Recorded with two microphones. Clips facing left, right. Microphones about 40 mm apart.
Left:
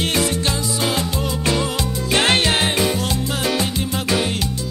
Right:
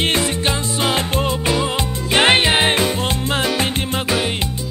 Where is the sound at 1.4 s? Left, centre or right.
Right.